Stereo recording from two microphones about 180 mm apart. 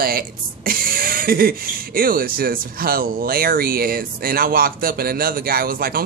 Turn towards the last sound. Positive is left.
turn(degrees=-55)  # may be behind; listen again after turning